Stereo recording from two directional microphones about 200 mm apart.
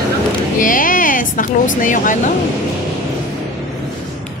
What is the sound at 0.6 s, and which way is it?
A woman's voice, 40° left (ahead or behind).